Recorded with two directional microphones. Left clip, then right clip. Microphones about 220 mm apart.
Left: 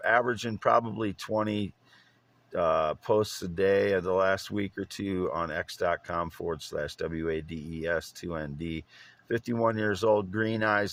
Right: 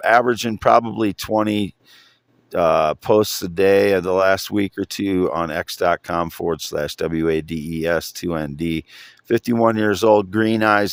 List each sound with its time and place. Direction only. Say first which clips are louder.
0.0 s speech: right 10 dB; 50° right (ahead or behind)